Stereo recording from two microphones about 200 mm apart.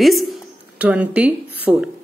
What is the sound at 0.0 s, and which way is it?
A woman's voice, centre (ahead or behind).